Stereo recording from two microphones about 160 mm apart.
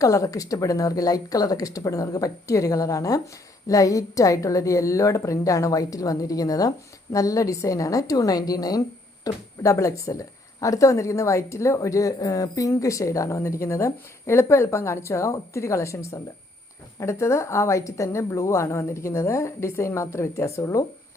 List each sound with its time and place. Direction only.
0.0 s a woman's voice: 20° left (ahead or behind)